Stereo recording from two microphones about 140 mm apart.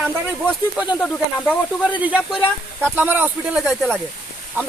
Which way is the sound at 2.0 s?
10° right (ahead or behind).